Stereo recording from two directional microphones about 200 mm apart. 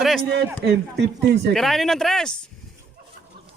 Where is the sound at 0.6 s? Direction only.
55° right (ahead or behind).